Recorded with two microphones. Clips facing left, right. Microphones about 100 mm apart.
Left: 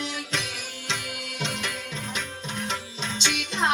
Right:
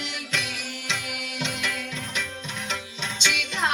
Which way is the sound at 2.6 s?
35° left (ahead or behind).